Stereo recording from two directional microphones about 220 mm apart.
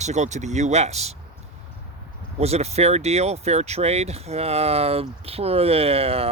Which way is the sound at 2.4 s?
30° right (ahead or behind).